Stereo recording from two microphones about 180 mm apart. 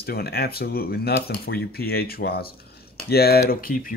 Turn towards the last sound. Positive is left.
turn(degrees=50)  # may be behind; listen again after turning